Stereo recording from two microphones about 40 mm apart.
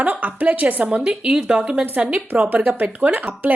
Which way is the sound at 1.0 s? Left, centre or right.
Right.